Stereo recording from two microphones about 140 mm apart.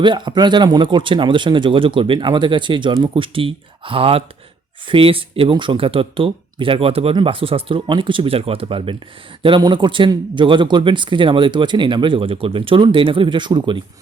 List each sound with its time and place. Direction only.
0.0 s speech: 35° right (ahead or behind)